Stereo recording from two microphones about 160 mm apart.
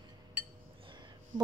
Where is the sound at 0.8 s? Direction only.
30° right (ahead or behind).